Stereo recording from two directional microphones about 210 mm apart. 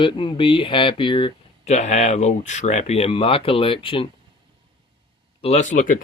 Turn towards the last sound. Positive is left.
turn(degrees=40)  # may be behind; listen again after turning